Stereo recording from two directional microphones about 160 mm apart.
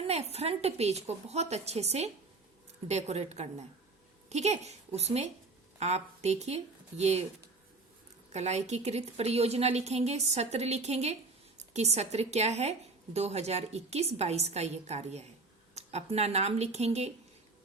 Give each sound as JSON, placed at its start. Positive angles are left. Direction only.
{"t": 0.0, "sound": "a woman's voice", "side_deg": -40}
{"t": 8.3, "sound": "a woman's voice", "side_deg": -45}